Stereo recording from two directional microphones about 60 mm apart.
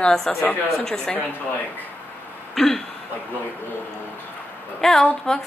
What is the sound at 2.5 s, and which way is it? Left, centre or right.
Throat clearing, centre.